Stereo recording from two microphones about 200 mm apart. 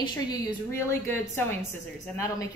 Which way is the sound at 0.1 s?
20° left (ahead or behind).